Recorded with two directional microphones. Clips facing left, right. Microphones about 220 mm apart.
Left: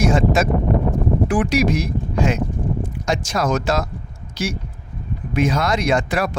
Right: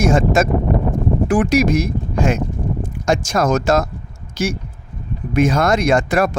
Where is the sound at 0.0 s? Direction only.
45° right (ahead or behind).